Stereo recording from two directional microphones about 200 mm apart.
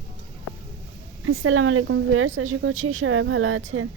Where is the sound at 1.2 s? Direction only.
85° right.